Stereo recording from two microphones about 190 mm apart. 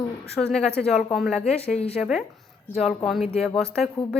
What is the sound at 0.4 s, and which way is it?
A woman's voice, 5° left (ahead or behind).